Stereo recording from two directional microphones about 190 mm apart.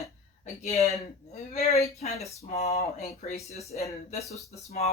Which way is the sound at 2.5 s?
35° left (ahead or behind).